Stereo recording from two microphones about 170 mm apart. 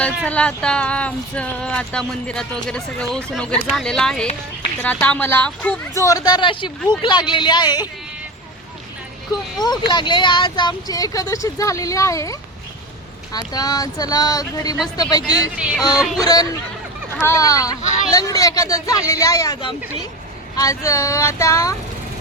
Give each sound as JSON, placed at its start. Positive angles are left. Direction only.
{"t": 0.3, "sound": "speech", "side_deg": 5}
{"t": 5.9, "sound": "speech", "side_deg": 20}
{"t": 9.6, "sound": "speech", "side_deg": 25}
{"t": 16.0, "sound": "speech", "side_deg": 0}
{"t": 16.2, "sound": "speech", "side_deg": 20}